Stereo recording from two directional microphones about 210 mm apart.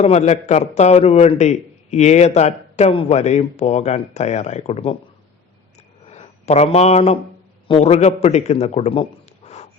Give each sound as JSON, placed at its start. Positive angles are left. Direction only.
{"t": 0.0, "sound": "a man's voice", "side_deg": 30}
{"t": 6.1, "sound": "a man's voice", "side_deg": 30}